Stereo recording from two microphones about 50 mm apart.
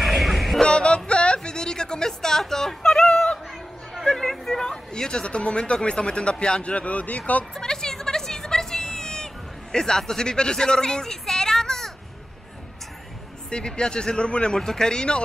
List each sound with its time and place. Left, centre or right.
0.0 s music: centre
0.6 s music: centre
3.9 s speech: centre; by 7.4 s left
7.5 s a sound: centre
13.5 s speech: centre